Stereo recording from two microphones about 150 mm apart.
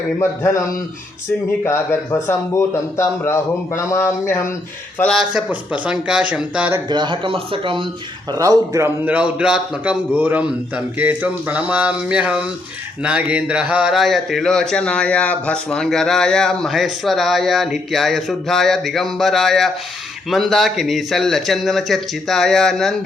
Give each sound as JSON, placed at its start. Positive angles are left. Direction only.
{"t": 0.2, "sound": "a man's voice", "side_deg": 20}
{"t": 4.9, "sound": "a man's voice", "side_deg": 5}
{"t": 5.3, "sound": "a man's voice", "side_deg": -10}
{"t": 6.9, "sound": "speech", "side_deg": -30}
{"t": 8.3, "sound": "a man's voice", "side_deg": -25}